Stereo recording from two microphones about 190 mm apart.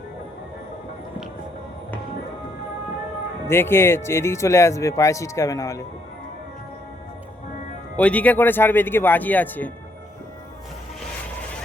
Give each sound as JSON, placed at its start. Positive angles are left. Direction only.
{"t": 3.4, "sound": "speech", "side_deg": 10}
{"t": 7.9, "sound": "speech", "side_deg": 5}